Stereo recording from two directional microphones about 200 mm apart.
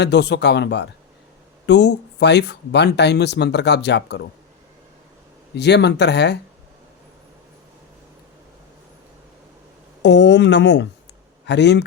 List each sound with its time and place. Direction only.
0.0 s speech: 55° left (ahead or behind)
5.5 s speech: 60° left (ahead or behind)
10.0 s speech: 60° left (ahead or behind)